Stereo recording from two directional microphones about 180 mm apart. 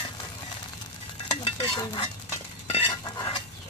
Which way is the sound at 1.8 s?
25° left (ahead or behind).